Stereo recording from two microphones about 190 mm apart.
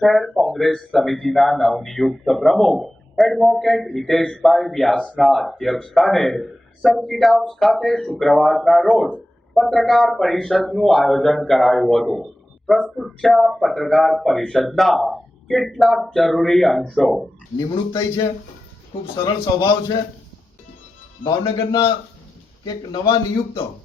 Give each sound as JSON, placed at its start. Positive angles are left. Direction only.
{"t": 0.0, "sound": "speech", "side_deg": 0}
{"t": 19.2, "sound": "a man's voice", "side_deg": 20}
{"t": 21.2, "sound": "a man's voice", "side_deg": 20}